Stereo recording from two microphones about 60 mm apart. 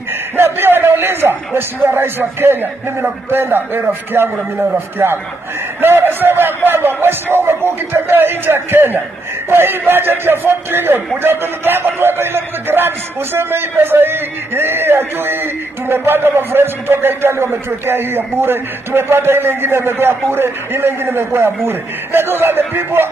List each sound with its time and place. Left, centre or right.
0.4 s a man's voice: right